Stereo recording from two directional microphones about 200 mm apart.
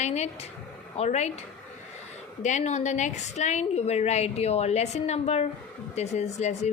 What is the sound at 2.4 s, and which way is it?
Speech, 35° left (ahead or behind).